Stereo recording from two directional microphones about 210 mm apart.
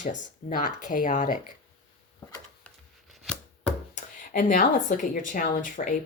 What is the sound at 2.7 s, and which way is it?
Chopping, 5° left (ahead or behind).